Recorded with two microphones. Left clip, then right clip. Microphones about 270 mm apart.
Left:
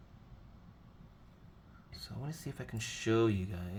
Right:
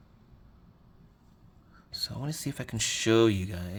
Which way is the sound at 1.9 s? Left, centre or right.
Right.